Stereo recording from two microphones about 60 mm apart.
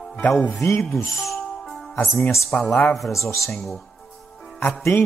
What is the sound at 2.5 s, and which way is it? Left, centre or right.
Speech, left.